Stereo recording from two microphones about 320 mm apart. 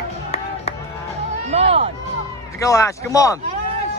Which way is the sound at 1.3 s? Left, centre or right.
Centre.